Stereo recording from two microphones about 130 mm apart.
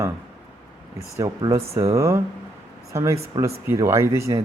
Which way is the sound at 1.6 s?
50° right (ahead or behind).